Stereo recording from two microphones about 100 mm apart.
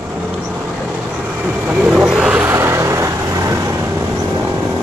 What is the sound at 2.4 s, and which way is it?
Vehicle, 25° right (ahead or behind).